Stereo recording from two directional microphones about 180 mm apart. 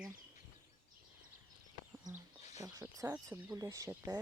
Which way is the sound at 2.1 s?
20° right (ahead or behind).